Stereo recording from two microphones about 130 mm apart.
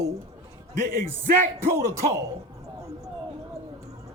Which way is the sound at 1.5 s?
20° right (ahead or behind).